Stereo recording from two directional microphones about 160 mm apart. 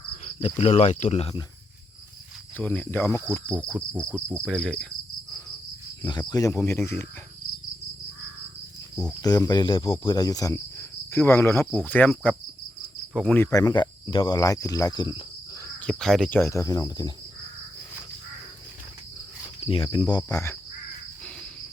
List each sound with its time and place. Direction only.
0.3 s speech: 40° left (ahead or behind)
2.6 s speech: 10° left (ahead or behind)
3.9 s insect: 15° right (ahead or behind)
4.4 s cricket: 5° left (ahead or behind)
6.0 s speech: 30° left (ahead or behind)
9.2 s speech: 25° left (ahead or behind)
10.0 s cricket: 25° left (ahead or behind)
11.9 s speech: 10° left (ahead or behind)
12.8 s cricket: 5° left (ahead or behind); by 15.2 s 30° left (ahead or behind)
15.6 s speech: 5° left (ahead or behind)
16.4 s speech: 20° left (ahead or behind)
19.5 s speech: 35° left (ahead or behind)
20.3 s speech: 20° left (ahead or behind)